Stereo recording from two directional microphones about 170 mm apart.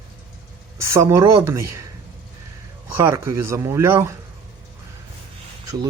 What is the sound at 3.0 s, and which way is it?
Speech, 15° right (ahead or behind).